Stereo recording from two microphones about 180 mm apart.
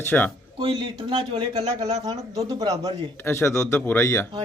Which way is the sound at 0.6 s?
25° right (ahead or behind).